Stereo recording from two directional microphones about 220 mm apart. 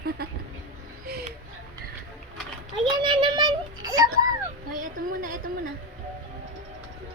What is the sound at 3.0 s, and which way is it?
A child's voice, 20° right (ahead or behind).